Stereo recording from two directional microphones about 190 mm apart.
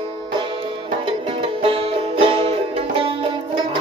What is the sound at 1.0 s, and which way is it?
Music, 25° right (ahead or behind).